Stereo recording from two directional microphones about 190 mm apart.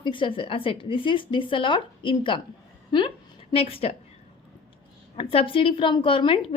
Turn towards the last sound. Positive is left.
turn(degrees=25)  # may be behind; listen again after turning